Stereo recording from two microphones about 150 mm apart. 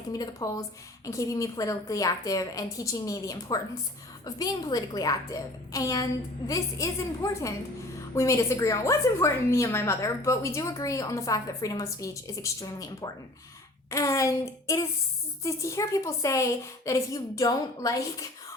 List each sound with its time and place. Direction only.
0.1 s a woman's voice: 25° left (ahead or behind)